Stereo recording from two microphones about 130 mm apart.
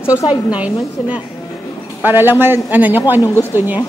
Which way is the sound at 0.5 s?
10° right (ahead or behind).